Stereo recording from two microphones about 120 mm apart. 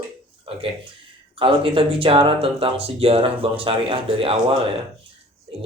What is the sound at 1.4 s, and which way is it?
Speech, 45° right (ahead or behind).